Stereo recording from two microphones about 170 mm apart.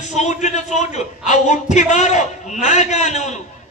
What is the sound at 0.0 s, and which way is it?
A man's voice, 45° left (ahead or behind).